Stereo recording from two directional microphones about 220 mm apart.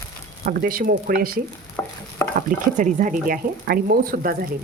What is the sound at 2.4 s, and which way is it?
Speech, 35° right (ahead or behind).